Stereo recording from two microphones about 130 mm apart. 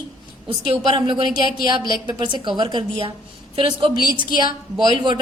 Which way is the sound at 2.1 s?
35° right (ahead or behind).